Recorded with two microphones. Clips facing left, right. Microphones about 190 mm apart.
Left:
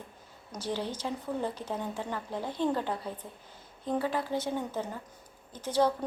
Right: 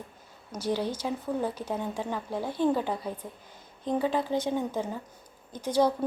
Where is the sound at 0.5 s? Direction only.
10° right (ahead or behind).